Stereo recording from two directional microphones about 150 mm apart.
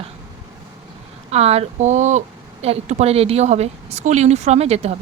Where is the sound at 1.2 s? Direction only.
45° right (ahead or behind).